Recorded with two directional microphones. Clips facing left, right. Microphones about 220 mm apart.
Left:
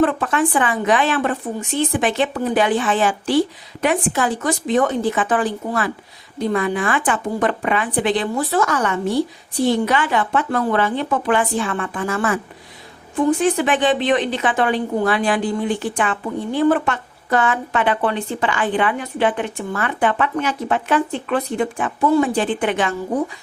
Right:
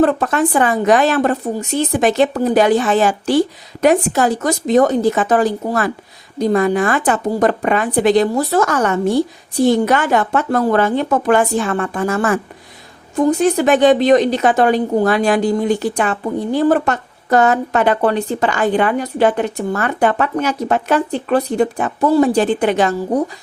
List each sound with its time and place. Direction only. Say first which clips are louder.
0.0 s a woman's voice: right 3 dB; 40° right (ahead or behind)